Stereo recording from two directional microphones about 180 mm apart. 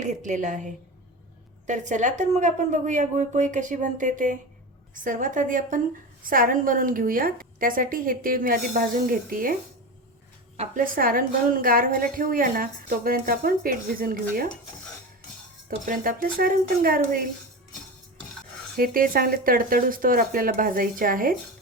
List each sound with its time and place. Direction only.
0.0 s a woman's voice: 40° right (ahead or behind)
10.6 s a woman's voice: 50° right (ahead or behind)
15.9 s a woman's voice: 50° right (ahead or behind)
18.8 s a woman's voice: 50° right (ahead or behind)